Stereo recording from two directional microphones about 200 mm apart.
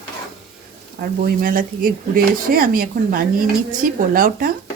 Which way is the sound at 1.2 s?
45° right (ahead or behind).